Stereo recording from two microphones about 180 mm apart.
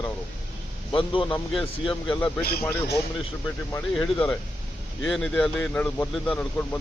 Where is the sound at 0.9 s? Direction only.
30° left (ahead or behind).